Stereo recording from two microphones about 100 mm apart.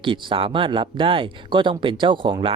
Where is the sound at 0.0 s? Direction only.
55° right (ahead or behind).